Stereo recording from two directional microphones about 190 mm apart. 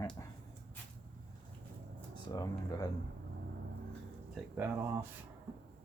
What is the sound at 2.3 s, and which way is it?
Speech, 20° left (ahead or behind).